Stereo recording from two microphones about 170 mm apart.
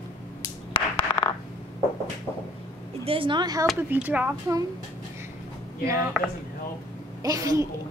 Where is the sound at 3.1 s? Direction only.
30° right (ahead or behind).